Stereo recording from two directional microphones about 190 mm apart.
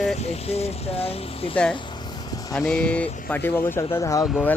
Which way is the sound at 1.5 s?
5° left (ahead or behind).